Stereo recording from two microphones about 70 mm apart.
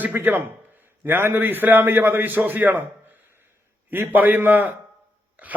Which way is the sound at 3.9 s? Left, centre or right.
Right.